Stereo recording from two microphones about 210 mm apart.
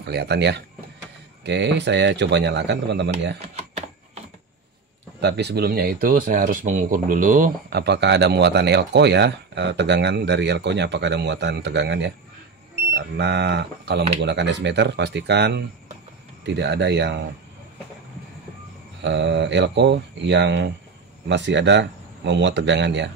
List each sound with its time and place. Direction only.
0.0 s speech: 50° right (ahead or behind)
3.5 s typing: 30° right (ahead or behind)
5.2 s speech: 55° right (ahead or behind)
7.8 s speech: 55° right (ahead or behind)
18.9 s speech: 55° right (ahead or behind)